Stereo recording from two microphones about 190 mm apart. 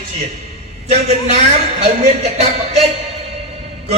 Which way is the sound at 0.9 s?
35° right (ahead or behind).